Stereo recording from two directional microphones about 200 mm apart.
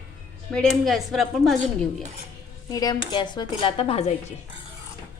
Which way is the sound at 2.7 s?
20° left (ahead or behind).